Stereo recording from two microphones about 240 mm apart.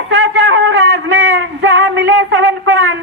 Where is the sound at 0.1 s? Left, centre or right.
Right.